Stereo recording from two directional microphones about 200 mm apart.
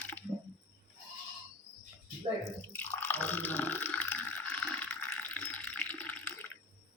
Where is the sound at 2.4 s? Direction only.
10° left (ahead or behind).